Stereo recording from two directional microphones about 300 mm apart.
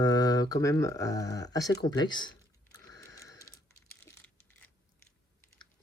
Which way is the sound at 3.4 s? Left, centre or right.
Left.